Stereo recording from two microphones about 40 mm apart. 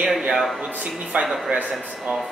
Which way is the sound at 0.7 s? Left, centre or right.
Right.